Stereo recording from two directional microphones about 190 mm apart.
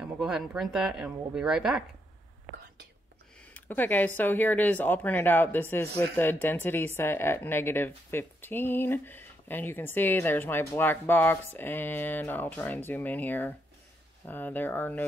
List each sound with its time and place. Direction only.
0.0 s speech: 5° right (ahead or behind)
3.3 s speech: 10° left (ahead or behind)